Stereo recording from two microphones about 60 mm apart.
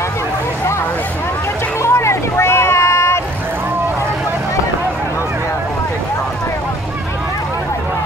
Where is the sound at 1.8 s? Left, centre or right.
Left.